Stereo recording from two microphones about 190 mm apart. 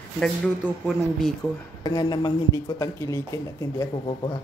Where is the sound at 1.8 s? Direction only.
20° left (ahead or behind).